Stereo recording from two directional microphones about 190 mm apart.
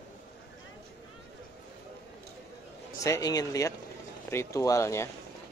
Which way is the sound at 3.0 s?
20° left (ahead or behind).